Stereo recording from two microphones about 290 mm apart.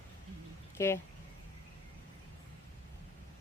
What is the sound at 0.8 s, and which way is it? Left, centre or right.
Speech, centre.